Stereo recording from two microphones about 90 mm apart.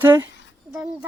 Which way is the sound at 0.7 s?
10° right (ahead or behind).